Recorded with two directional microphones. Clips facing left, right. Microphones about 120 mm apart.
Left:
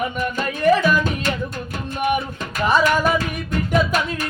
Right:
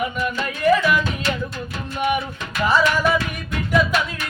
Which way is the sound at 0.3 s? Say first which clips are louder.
Left 1 dB; 50° left (ahead or behind).